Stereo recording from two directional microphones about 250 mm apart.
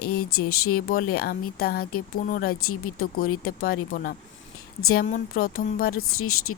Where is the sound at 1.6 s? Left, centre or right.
Left.